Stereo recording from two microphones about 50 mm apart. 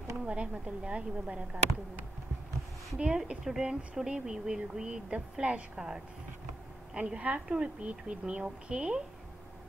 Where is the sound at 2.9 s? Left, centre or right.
Centre.